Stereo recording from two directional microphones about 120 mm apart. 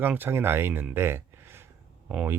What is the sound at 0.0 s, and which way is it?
Speech, 20° right (ahead or behind).